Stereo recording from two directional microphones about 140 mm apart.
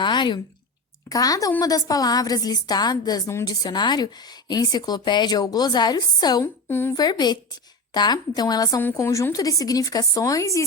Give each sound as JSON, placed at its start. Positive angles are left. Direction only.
{"t": 0.0, "sound": "a sound", "side_deg": 35}
{"t": 1.1, "sound": "a woman's voice", "side_deg": 25}
{"t": 6.4, "sound": "a woman's voice", "side_deg": 15}
{"t": 6.9, "sound": "a woman's voice", "side_deg": 30}